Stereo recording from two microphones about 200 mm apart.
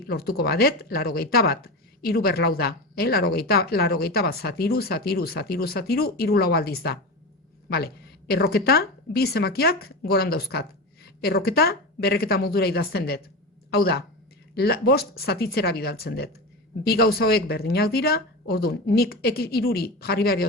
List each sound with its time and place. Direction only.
0.1 s a woman's voice: 50° left (ahead or behind)